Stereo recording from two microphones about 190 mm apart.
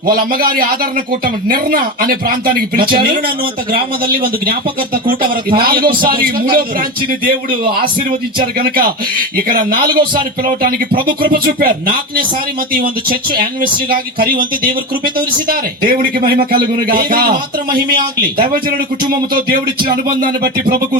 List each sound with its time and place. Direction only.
0.0 s a man's voice: 50° right (ahead or behind)
20.2 s a man's voice: 50° right (ahead or behind)